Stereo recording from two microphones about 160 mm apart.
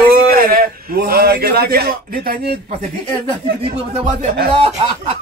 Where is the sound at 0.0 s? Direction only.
70° right (ahead or behind).